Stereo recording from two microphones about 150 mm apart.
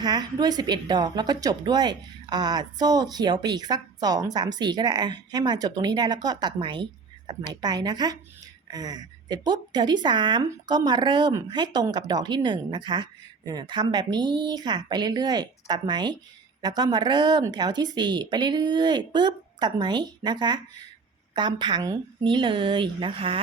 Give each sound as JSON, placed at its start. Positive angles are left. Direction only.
{"t": 0.0, "sound": "a woman's voice", "side_deg": -30}